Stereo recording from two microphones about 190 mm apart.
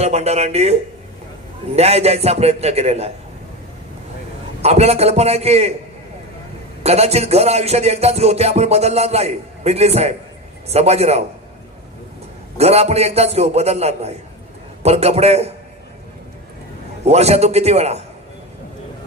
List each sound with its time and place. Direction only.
0.0 s music: 35° right (ahead or behind)
4.6 s music: 35° right (ahead or behind)
6.8 s music: 35° right (ahead or behind)
12.5 s music: 35° right (ahead or behind)
17.1 s music: 35° right (ahead or behind)